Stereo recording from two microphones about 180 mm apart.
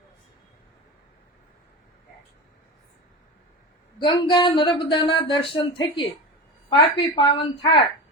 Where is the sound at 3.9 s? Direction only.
25° left (ahead or behind).